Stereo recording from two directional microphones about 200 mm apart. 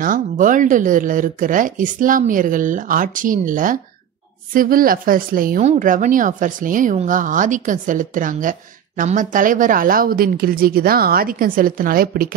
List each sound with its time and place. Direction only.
0.0 s speech: 40° right (ahead or behind)